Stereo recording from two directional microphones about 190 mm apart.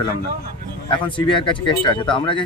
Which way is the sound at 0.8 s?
25° left (ahead or behind).